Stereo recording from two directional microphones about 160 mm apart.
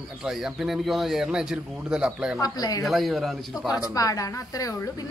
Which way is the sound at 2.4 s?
25° left (ahead or behind).